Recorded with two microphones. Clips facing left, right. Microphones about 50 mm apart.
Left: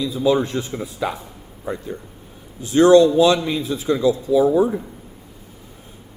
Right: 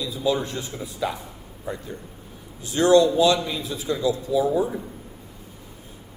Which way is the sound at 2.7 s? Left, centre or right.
Left.